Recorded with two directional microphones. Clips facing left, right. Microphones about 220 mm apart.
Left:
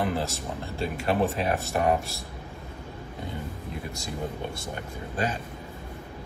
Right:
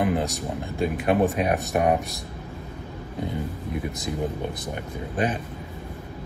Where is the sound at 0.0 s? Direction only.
15° right (ahead or behind).